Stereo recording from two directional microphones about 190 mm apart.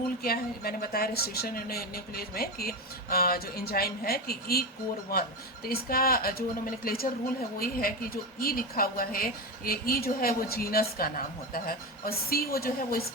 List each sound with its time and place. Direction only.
0.2 s speech: 50° left (ahead or behind)
5.6 s speech: 50° left (ahead or behind)